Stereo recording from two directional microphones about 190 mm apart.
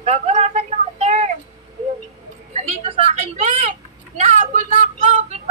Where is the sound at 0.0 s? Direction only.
35° right (ahead or behind).